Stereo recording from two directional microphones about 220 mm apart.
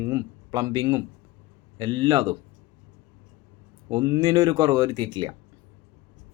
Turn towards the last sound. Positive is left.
turn(degrees=-20)  # may be behind; listen again after turning